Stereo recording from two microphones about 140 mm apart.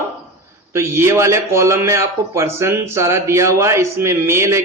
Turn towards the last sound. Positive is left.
turn(degrees=-20)  # may be behind; listen again after turning